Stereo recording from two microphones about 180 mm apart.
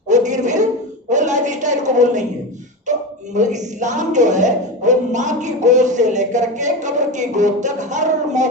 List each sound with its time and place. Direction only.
0.1 s a sound: 40° right (ahead or behind)
1.1 s a woman's voice: 40° right (ahead or behind)
3.3 s a woman's voice: 45° right (ahead or behind)